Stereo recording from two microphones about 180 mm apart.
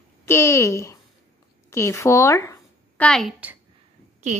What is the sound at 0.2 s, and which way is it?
A woman's voice, 15° left (ahead or behind).